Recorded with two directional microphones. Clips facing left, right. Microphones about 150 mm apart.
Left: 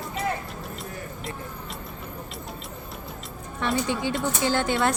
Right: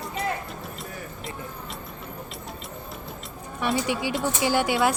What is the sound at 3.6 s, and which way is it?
Speech, 10° right (ahead or behind).